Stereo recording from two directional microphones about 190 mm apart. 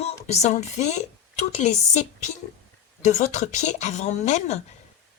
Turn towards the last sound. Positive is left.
turn(degrees=35)  # may be behind; listen again after turning